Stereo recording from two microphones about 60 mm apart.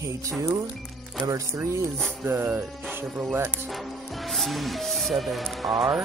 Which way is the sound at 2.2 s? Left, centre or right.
Right.